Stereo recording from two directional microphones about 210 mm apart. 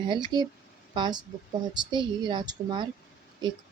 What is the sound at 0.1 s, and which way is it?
Speech, 20° right (ahead or behind).